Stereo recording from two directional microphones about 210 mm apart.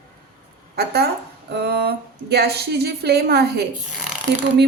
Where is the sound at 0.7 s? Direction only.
50° right (ahead or behind).